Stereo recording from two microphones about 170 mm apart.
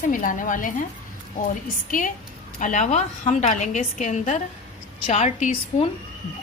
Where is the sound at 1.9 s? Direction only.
50° left (ahead or behind).